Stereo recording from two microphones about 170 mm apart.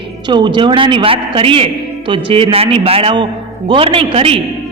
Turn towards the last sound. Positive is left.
turn(degrees=-35)  # may be behind; listen again after turning